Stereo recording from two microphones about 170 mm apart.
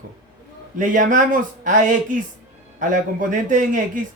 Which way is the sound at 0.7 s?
50° right (ahead or behind).